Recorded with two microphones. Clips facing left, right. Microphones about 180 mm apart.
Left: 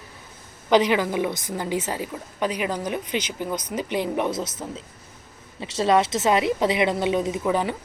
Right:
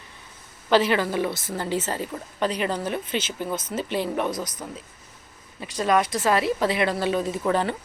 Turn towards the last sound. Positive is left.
turn(degrees=10)  # may be behind; listen again after turning